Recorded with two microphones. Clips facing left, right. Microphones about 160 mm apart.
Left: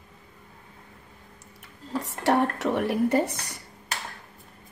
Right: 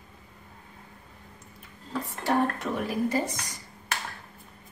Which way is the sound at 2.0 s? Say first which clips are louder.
Left 3 dB; 80° left.